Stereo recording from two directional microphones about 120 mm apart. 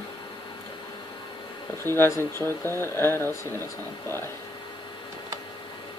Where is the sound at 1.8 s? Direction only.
20° left (ahead or behind).